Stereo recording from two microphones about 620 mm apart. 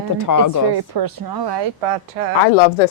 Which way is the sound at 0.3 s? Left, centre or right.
Left.